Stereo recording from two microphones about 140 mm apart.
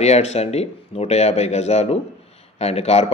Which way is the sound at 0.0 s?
50° left (ahead or behind).